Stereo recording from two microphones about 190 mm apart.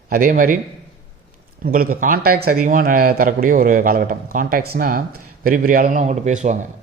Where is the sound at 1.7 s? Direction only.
50° right (ahead or behind).